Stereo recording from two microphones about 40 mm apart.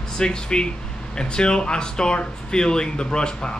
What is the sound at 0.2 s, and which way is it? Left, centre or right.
Speech, left.